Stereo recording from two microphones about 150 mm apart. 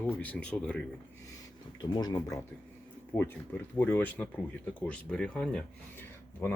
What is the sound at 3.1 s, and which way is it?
Speech, 15° left (ahead or behind).